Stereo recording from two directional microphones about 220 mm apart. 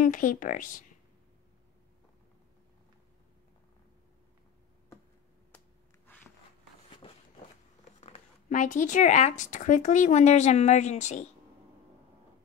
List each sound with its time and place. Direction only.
0.0 s speech: 35° left (ahead or behind)
6.1 s a sound: 10° left (ahead or behind)
7.0 s walk: 25° left (ahead or behind)
8.0 s zipper: 30° left (ahead or behind)
9.4 s speech: 35° left (ahead or behind)